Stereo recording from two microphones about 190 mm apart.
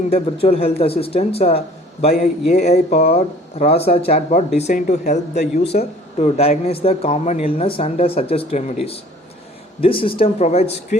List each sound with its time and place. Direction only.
0.1 s speech: 30° left (ahead or behind)